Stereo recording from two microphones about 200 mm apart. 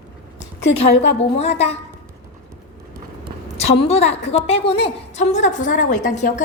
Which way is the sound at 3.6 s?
30° left (ahead or behind).